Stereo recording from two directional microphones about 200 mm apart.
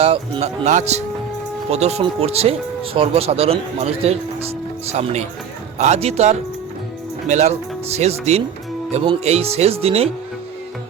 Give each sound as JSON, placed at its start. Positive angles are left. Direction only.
{"t": 0.0, "sound": "speech", "side_deg": -30}